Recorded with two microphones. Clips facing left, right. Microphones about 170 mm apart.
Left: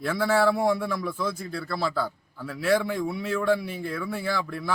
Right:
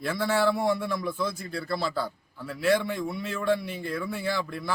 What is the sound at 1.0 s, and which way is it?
Speech, 25° right (ahead or behind).